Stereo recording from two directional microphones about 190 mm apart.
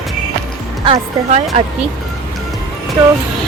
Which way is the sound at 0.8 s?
35° right (ahead or behind).